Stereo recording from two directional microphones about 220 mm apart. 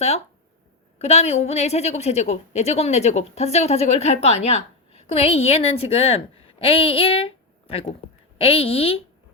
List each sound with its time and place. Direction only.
0.9 s a woman's voice: 30° left (ahead or behind)